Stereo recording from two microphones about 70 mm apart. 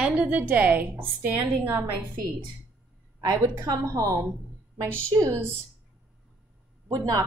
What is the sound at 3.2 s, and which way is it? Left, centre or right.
A woman's voice, right.